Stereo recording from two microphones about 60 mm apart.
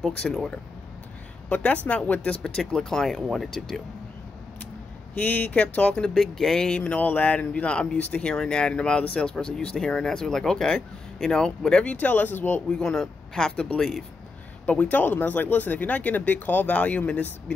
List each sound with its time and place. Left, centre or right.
0.0 s speech: centre
1.5 s speech: left
2.2 s speech: centre
5.1 s speech: left
6.1 s speech: centre
6.8 s speech: left
12.7 s speech: centre
14.7 s speech: left